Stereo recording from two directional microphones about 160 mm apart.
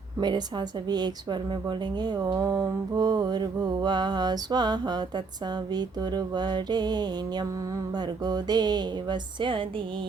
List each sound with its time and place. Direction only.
0.2 s a woman's voice: 25° right (ahead or behind)